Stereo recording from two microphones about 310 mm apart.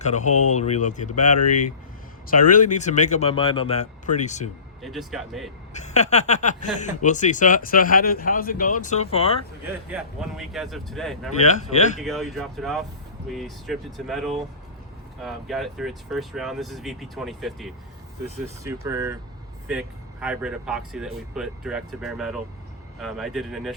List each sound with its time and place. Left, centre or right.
0.0 s speech: left
1.4 s speech: left
2.5 s speech: left
4.8 s speech: centre
5.7 s speech: left
9.9 s speech: centre
11.3 s speech: left
11.9 s speech: centre